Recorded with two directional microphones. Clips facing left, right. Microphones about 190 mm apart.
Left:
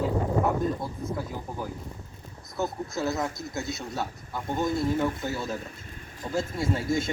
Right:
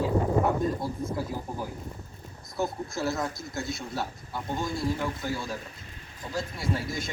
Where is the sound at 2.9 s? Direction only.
20° left (ahead or behind).